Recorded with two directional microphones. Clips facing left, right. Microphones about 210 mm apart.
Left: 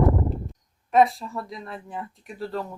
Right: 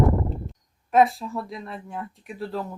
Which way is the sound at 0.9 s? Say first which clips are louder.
Even; centre (ahead or behind).